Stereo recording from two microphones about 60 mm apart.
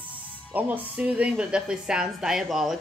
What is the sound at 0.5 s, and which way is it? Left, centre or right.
Speech, right.